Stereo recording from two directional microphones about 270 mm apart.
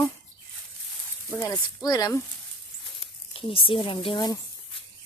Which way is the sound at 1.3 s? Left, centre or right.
Centre.